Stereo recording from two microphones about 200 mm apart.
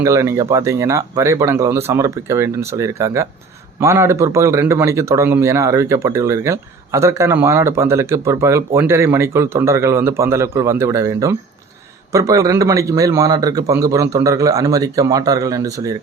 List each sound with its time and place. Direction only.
0.0 s a man's voice: 15° right (ahead or behind)